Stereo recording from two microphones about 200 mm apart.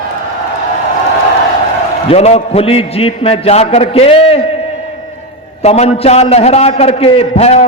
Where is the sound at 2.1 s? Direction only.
30° left (ahead or behind).